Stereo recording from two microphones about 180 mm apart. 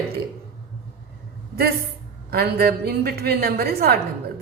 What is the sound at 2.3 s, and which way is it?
A woman's voice, 60° right (ahead or behind).